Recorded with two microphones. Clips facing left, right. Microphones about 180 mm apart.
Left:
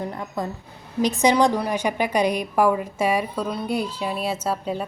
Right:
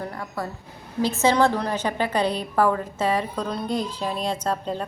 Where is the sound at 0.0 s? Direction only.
20° left (ahead or behind).